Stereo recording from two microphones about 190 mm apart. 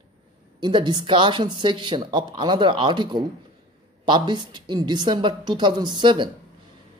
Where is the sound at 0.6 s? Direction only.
25° right (ahead or behind).